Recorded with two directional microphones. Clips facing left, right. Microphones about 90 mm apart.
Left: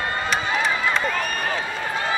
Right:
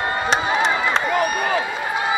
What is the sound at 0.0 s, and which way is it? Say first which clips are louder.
Run: right 4 dB; 20° right (ahead or behind).